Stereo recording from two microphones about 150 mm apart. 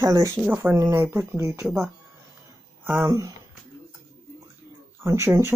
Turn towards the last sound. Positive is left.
turn(degrees=-20)  # may be behind; listen again after turning